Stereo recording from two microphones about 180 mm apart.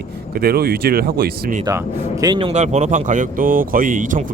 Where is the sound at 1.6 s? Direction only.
20° right (ahead or behind); by 4.2 s 45° right (ahead or behind).